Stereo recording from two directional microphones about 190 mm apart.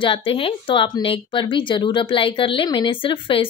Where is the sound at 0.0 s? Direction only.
30° left (ahead or behind).